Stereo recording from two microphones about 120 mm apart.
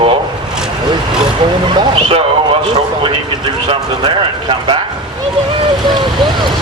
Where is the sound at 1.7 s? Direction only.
50° right (ahead or behind).